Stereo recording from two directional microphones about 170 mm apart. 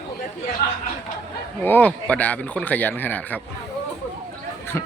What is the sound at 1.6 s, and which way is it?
Speech, 10° left (ahead or behind).